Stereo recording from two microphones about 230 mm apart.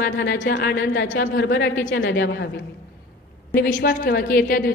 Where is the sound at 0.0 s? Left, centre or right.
Left.